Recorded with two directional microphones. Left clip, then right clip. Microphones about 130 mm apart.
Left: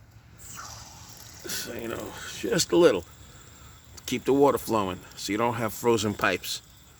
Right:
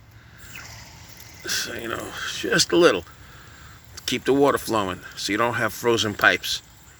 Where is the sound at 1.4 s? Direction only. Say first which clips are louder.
Right 7 dB; 25° left (ahead or behind); by 6.6 s 40° left (ahead or behind).